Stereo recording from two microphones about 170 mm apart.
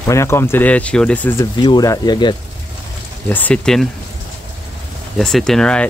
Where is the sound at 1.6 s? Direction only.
25° left (ahead or behind).